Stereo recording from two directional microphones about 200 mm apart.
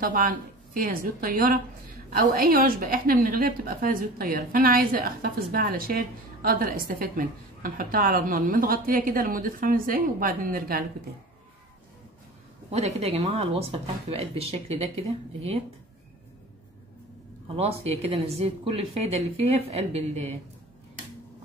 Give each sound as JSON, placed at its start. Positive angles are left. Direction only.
{"t": 0.0, "sound": "a woman's voice", "side_deg": -45}
{"t": 12.7, "sound": "speech", "side_deg": -30}
{"t": 17.6, "sound": "speech", "side_deg": -30}